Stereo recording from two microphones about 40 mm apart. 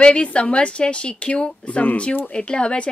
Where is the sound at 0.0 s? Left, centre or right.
Left.